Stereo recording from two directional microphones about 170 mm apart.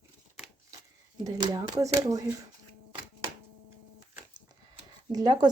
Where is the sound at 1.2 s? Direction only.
25° right (ahead or behind).